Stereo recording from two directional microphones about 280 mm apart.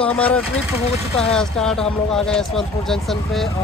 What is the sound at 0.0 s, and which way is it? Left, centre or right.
Speech, centre.